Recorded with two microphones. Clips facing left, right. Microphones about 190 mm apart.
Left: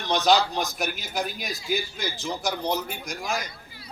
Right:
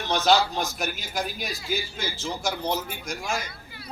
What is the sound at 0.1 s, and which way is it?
Speech, 15° left (ahead or behind).